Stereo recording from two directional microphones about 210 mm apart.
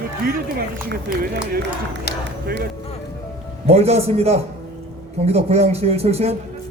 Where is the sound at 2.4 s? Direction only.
45° right (ahead or behind).